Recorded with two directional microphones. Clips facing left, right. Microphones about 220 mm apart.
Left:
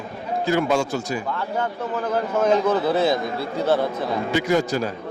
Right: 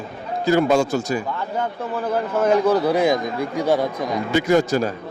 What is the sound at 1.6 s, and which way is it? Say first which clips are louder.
A man's voice: right 1 dB; 10° right (ahead or behind).